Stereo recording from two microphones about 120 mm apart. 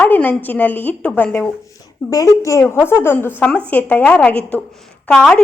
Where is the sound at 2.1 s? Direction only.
30° left (ahead or behind).